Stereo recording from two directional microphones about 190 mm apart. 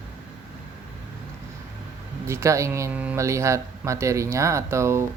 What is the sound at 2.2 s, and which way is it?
Speech, 15° right (ahead or behind).